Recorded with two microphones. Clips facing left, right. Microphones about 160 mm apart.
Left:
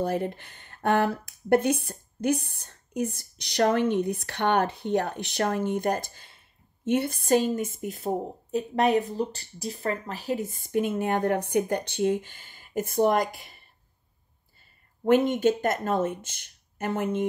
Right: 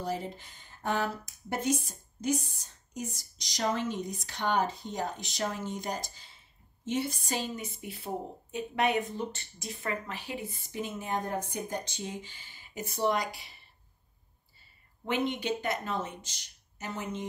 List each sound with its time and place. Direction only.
0.0 s speech: 60° left (ahead or behind)
15.0 s speech: 45° left (ahead or behind)